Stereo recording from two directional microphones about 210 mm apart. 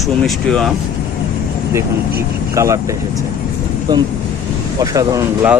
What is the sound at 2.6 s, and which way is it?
Speech, 15° right (ahead or behind).